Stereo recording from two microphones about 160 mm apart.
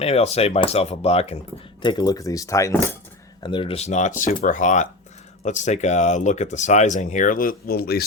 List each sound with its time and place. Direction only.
0.0 s speech: 40° left (ahead or behind)
1.8 s speech: 25° left (ahead or behind)
3.4 s speech: 30° left (ahead or behind); by 8.0 s 75° left (ahead or behind)